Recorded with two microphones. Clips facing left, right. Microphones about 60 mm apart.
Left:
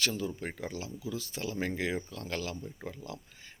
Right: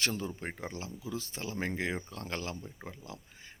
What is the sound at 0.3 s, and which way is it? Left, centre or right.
Speech, right.